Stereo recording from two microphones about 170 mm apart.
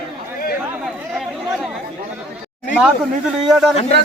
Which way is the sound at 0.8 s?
Centre (ahead or behind).